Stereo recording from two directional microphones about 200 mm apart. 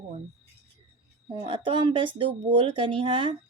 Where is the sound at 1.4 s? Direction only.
25° right (ahead or behind).